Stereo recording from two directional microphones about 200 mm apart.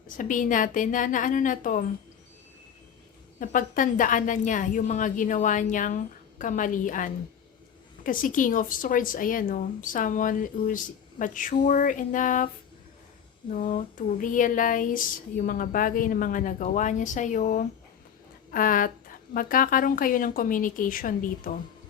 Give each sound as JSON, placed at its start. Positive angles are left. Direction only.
{"t": 0.2, "sound": "speech", "side_deg": 40}
{"t": 3.4, "sound": "speech", "side_deg": 40}
{"t": 13.5, "sound": "a woman's voice", "side_deg": 40}